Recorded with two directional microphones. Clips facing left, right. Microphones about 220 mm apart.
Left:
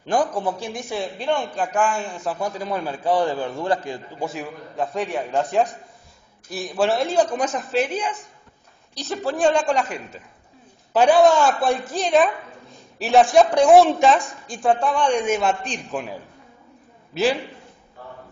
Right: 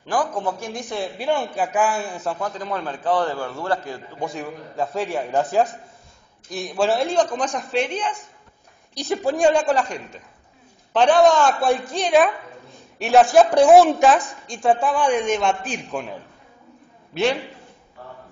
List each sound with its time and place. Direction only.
0.0 s a man's voice: 20° left (ahead or behind)
0.7 s a man's voice: 5° left (ahead or behind)
2.3 s a man's voice: 10° left (ahead or behind)
4.3 s a woman's voice: centre (ahead or behind)
8.9 s a man's voice: 15° right (ahead or behind)
10.9 s a woman's voice: 10° left (ahead or behind)
15.2 s a man's voice: 5° left (ahead or behind)